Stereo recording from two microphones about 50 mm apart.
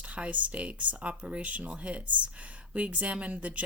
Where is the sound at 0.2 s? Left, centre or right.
Right.